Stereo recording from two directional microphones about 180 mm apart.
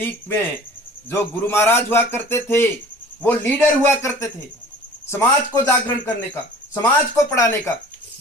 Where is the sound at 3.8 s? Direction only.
15° left (ahead or behind).